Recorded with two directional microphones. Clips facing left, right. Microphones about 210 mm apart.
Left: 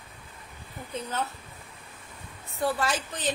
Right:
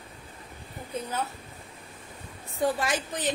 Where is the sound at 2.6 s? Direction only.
15° right (ahead or behind).